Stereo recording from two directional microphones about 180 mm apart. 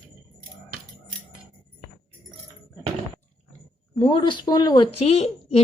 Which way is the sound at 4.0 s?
25° left (ahead or behind).